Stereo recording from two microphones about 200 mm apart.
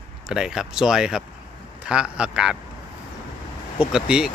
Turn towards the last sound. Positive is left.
turn(degrees=-5)  # may be behind; listen again after turning